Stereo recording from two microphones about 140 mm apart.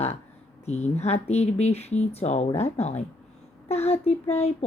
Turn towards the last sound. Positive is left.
turn(degrees=50)  # may be behind; listen again after turning